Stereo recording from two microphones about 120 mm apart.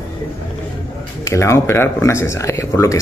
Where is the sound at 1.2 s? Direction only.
25° left (ahead or behind).